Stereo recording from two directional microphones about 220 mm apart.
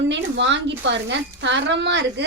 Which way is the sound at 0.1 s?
55° right (ahead or behind).